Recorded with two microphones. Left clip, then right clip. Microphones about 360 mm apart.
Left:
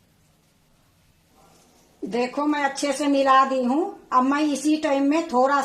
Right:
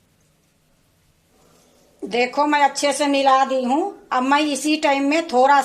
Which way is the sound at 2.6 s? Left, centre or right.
Right.